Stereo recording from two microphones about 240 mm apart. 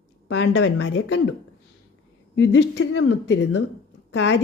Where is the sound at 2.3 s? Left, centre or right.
Left.